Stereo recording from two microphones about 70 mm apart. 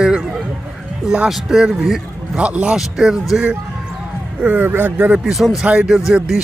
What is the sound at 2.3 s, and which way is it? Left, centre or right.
A man's voice, centre.